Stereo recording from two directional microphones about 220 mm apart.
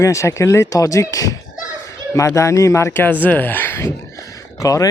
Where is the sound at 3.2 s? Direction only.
10° left (ahead or behind).